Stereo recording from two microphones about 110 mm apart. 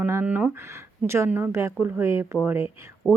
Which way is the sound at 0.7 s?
25° right (ahead or behind).